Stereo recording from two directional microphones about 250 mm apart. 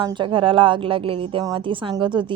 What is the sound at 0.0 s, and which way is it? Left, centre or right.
A woman's voice, centre.